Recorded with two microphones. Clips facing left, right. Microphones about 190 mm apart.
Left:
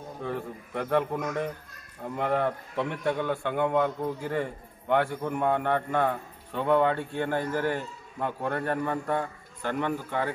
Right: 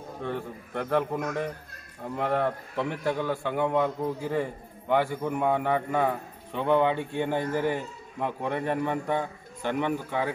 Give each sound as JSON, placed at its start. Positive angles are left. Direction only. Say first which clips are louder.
{"t": 0.2, "sound": "a man's voice", "louder": "even", "side_deg": 0}
{"t": 7.0, "sound": "speech", "louder": "right 1 dB", "side_deg": -15}
{"t": 7.5, "sound": "a man's voice", "louder": "right 1 dB", "side_deg": 0}